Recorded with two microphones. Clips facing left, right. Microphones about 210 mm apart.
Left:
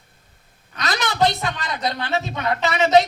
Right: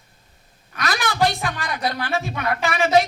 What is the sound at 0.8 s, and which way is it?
Speech, 20° left (ahead or behind).